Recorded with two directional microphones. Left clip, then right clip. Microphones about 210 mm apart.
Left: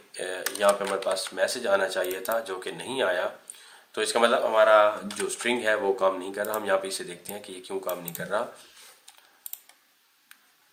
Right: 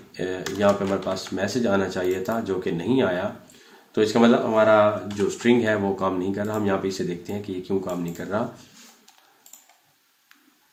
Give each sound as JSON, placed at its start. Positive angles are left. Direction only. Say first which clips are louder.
{"t": 0.1, "sound": "speech", "louder": "right 3 dB", "side_deg": 15}